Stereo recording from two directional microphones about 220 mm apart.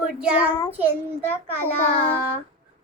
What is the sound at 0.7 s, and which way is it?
Speech, 10° right (ahead or behind).